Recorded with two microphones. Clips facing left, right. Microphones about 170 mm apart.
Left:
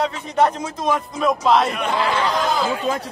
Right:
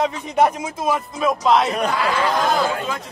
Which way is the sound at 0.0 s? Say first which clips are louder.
Right 1 dB; 10° right (ahead or behind).